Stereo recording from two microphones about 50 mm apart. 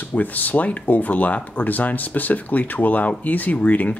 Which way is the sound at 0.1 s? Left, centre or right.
Left.